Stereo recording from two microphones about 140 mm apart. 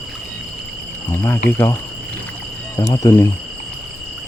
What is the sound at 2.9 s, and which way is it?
Speech, 20° left (ahead or behind).